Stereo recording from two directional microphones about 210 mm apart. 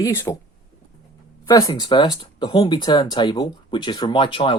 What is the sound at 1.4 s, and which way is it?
Speech, 15° left (ahead or behind).